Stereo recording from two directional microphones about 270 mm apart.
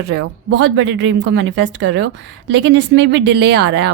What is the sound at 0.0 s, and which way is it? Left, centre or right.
Speech, right.